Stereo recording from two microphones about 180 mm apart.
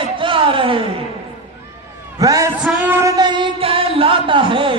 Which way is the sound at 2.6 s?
5° right (ahead or behind).